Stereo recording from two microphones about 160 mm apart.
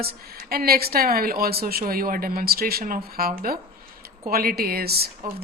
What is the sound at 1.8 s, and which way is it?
Speech, 60° right (ahead or behind).